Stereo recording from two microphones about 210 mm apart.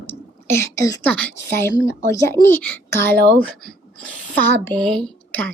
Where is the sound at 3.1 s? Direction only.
45° right (ahead or behind).